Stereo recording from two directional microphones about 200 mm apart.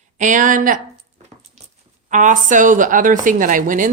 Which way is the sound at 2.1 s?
40° right (ahead or behind).